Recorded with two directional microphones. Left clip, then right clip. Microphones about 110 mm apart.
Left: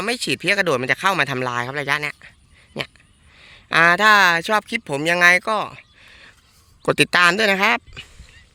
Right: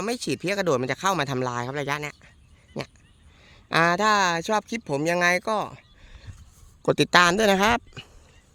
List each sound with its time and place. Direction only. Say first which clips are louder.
0.0 s speech: left 6 dB; centre (ahead or behind)
3.3 s speech: left 5 dB; 5° right (ahead or behind)
7.3 s speech: left 3 dB; 30° right (ahead or behind)